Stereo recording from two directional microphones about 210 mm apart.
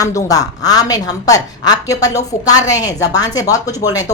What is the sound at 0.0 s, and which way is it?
A woman's voice, 15° left (ahead or behind).